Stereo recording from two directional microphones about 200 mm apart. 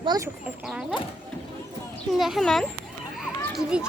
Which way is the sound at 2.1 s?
Centre (ahead or behind).